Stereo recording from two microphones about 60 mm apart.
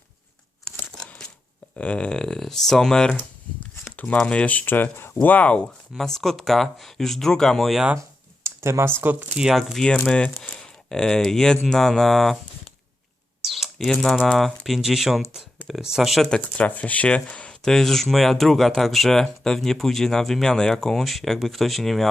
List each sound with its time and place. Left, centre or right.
0.9 s a sound: centre
1.7 s speech: centre
3.9 s speech: left
5.2 s speech: left
6.0 s speech: centre
8.4 s computer keyboard: right
9.6 s speech: centre
9.8 s speech: centre
10.4 s a sound: centre
10.9 s speech: centre
13.4 s a sound: centre
13.7 s speech: centre
16.3 s speech: left
17.6 s speech: centre